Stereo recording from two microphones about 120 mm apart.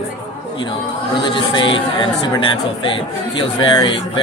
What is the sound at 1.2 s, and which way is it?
Speech, 45° left (ahead or behind).